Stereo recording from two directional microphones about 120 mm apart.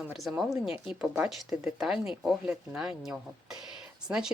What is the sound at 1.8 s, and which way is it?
Speech, 5° right (ahead or behind).